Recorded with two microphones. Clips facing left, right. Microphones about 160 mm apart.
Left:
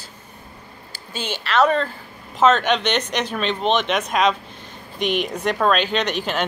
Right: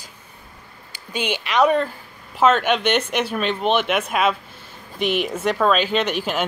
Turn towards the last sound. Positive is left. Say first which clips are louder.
# right 1 dB
turn(degrees=-10)  # may be behind; listen again after turning